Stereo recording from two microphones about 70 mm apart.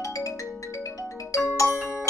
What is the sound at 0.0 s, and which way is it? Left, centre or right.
Music, left.